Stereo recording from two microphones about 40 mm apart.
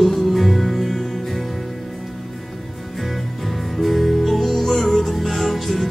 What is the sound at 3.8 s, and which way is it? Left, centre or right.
Music, centre.